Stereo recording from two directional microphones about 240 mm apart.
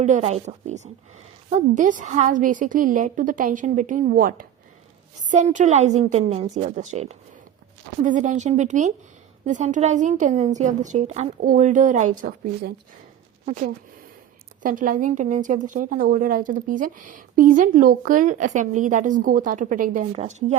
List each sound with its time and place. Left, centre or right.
0.0 s a woman's voice: right